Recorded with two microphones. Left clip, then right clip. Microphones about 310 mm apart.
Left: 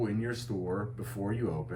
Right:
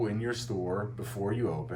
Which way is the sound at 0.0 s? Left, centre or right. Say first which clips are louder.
Right 2 dB; centre.